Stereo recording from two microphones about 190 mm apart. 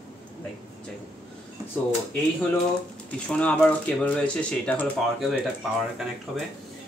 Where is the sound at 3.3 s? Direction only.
5° left (ahead or behind).